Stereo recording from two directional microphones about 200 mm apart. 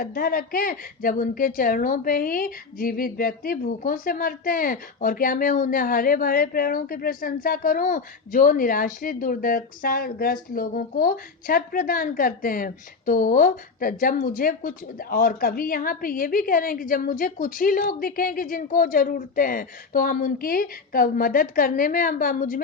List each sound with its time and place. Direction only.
0.0 s a woman's voice: 45° left (ahead or behind)